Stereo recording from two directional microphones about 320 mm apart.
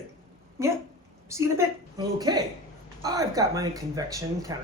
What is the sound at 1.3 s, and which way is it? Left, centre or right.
A woman's voice, centre.